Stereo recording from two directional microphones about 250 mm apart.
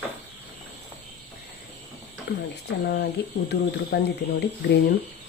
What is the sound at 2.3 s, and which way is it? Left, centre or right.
Speech, left.